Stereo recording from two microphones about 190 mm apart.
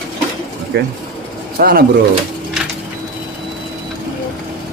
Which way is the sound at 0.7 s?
60° right (ahead or behind).